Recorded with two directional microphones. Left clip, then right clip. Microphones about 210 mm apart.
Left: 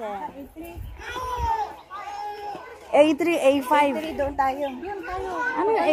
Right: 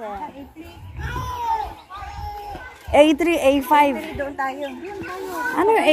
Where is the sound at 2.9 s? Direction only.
10° right (ahead or behind).